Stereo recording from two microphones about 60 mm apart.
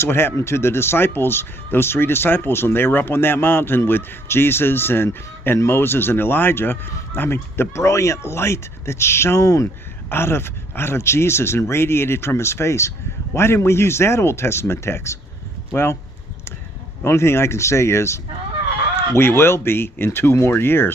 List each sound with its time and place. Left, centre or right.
0.0 s speech: left
7.7 s speech: left
10.0 s speech: left
17.0 s speech: left